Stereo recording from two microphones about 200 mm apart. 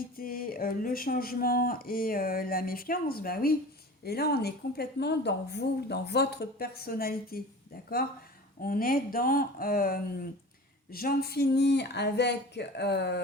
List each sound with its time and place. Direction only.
0.2 s a woman's voice: 45° left (ahead or behind)
8.6 s a woman's voice: 45° left (ahead or behind)